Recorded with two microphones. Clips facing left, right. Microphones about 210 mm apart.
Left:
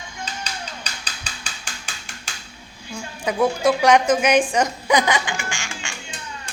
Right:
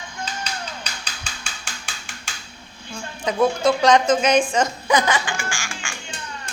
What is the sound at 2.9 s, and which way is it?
A woman's voice, 15° left (ahead or behind).